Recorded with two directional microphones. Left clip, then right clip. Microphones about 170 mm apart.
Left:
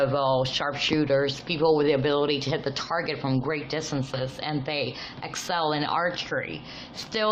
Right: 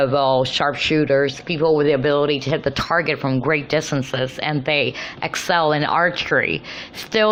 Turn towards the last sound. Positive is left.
turn(degrees=-30)  # may be behind; listen again after turning